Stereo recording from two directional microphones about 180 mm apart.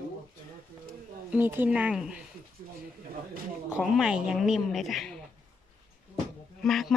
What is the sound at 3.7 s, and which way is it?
Speech, centre (ahead or behind).